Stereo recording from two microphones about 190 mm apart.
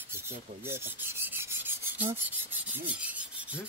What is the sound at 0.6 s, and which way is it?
Filing, 10° right (ahead or behind).